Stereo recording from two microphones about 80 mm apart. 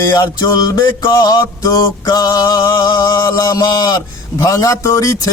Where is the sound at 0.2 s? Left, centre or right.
Left.